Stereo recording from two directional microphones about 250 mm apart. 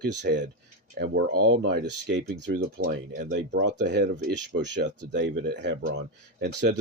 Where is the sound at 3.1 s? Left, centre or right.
Right.